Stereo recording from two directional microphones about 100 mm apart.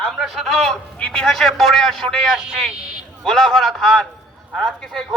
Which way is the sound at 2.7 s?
10° right (ahead or behind).